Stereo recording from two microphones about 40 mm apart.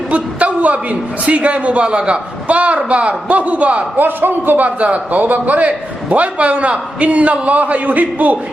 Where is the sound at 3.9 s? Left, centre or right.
Right.